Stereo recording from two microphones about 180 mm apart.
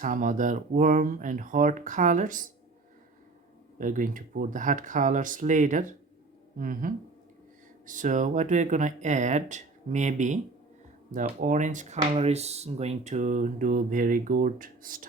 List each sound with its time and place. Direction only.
0.0 s speech: 45° right (ahead or behind)
3.8 s speech: 45° right (ahead or behind)